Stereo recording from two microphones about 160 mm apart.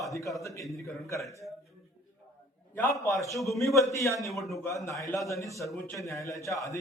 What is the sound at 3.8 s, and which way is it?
A man's voice, 20° left (ahead or behind).